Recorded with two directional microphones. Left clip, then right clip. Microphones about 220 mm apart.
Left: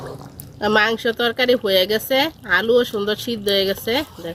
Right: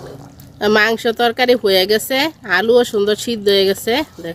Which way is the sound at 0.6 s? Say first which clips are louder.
Right 3 dB; 50° right (ahead or behind).